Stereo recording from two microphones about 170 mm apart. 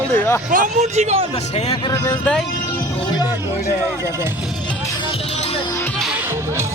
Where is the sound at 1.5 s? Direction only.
40° left (ahead or behind).